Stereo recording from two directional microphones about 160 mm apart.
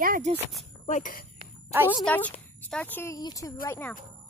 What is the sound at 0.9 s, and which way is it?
Speech, 60° left (ahead or behind).